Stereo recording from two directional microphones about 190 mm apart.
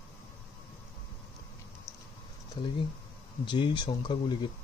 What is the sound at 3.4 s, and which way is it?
Speech, 25° left (ahead or behind).